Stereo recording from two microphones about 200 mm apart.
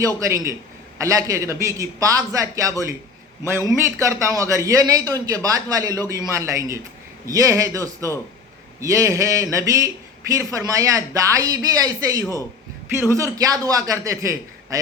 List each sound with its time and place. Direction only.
0.0 s speech: 15° right (ahead or behind)